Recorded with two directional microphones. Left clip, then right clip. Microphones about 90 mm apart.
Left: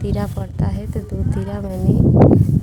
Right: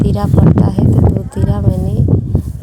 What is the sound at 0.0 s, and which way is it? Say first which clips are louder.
Speech: right 11 dB; 30° right (ahead or behind).